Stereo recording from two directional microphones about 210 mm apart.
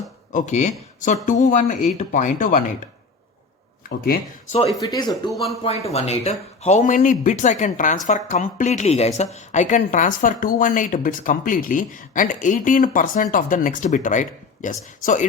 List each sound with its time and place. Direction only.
0.3 s a woman's voice: 35° left (ahead or behind)
3.8 s speech: 45° left (ahead or behind)
4.8 s a woman's voice: 20° left (ahead or behind); by 15.3 s 35° left (ahead or behind)